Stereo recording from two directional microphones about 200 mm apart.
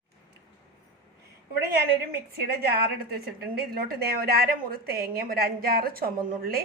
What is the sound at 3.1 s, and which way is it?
A woman's voice, 50° right (ahead or behind).